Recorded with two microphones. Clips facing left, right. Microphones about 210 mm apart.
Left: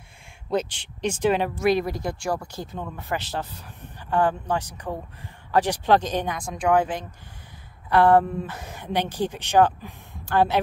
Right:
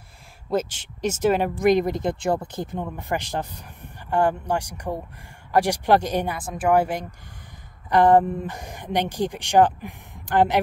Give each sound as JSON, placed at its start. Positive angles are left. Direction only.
{"t": 0.6, "sound": "speech", "side_deg": -45}
{"t": 1.3, "sound": "speech", "side_deg": -15}